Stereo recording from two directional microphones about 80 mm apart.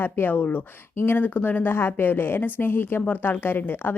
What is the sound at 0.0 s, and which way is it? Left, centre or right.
Speech, left.